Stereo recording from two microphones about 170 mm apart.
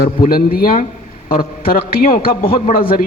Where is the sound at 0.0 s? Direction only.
60° left (ahead or behind).